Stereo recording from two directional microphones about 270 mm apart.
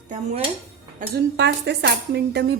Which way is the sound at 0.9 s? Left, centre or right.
Right.